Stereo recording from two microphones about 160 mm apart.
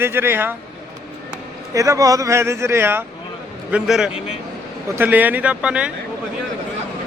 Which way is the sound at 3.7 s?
5° right (ahead or behind).